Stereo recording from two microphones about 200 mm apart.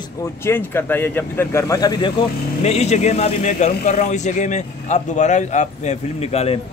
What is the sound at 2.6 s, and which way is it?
Speech, 35° left (ahead or behind).